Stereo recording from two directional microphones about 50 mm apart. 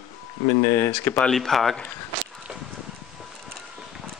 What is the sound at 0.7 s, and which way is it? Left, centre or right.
Speech, left.